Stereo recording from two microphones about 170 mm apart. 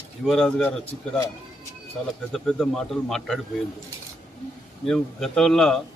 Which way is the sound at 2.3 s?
Centre (ahead or behind).